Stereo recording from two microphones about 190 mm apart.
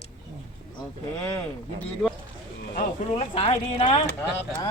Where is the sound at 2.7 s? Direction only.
30° left (ahead or behind).